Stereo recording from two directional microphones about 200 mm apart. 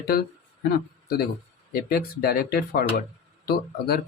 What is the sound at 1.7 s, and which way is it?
Speech, 50° left (ahead or behind).